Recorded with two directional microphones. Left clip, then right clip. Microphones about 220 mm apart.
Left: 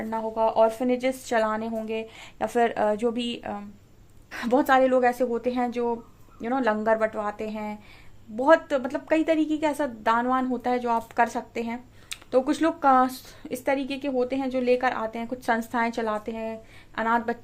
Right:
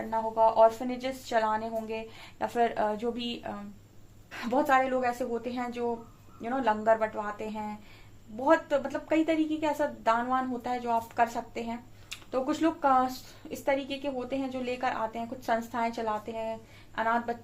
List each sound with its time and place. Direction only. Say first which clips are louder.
0.1 s a woman's voice: even; 50° left (ahead or behind)